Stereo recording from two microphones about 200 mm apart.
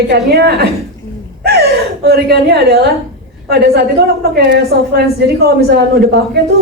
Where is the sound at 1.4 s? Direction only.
55° right (ahead or behind).